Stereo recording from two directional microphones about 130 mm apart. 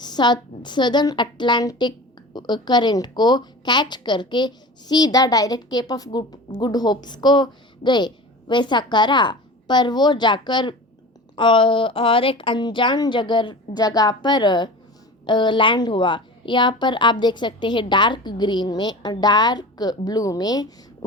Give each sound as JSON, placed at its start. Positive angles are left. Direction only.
{"t": 0.0, "sound": "a woman's voice", "side_deg": 35}